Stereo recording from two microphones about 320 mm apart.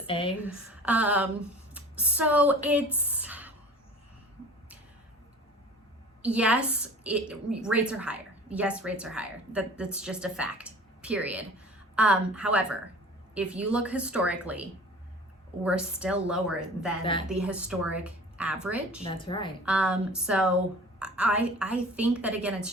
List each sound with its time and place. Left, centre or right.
0.0 s a woman's voice: centre
0.4 s a woman's voice: centre
6.2 s a woman's voice: centre
17.0 s speech: centre
17.2 s a woman's voice: centre
19.0 s speech: centre
19.6 s a woman's voice: centre